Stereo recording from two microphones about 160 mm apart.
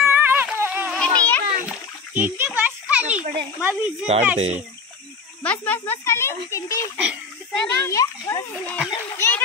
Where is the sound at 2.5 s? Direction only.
10° right (ahead or behind).